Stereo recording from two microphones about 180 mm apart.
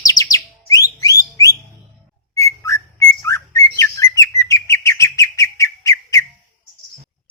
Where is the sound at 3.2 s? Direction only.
15° left (ahead or behind).